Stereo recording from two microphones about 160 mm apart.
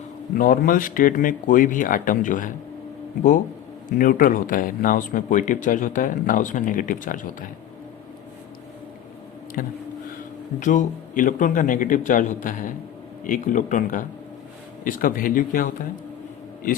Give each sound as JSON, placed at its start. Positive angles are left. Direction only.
{"t": 0.3, "sound": "speech", "side_deg": 60}
{"t": 3.8, "sound": "speech", "side_deg": 60}
{"t": 9.6, "sound": "speech", "side_deg": 60}